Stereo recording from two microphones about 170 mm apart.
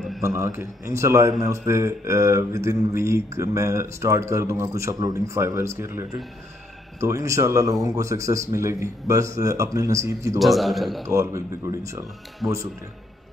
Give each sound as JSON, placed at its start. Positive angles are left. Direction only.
{"t": 0.4, "sound": "a man's voice", "side_deg": -15}
{"t": 10.4, "sound": "a man's voice", "side_deg": 0}
{"t": 11.1, "sound": "speech", "side_deg": -15}